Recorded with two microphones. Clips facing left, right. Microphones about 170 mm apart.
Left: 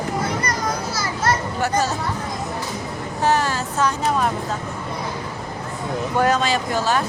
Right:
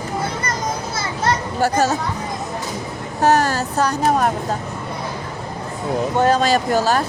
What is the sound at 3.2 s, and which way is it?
Speech, 40° right (ahead or behind).